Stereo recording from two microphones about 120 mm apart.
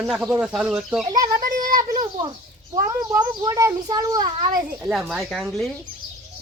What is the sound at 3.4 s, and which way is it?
Speech, 25° right (ahead or behind).